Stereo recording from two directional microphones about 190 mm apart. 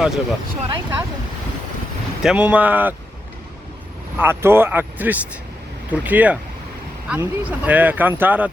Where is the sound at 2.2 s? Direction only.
5° right (ahead or behind).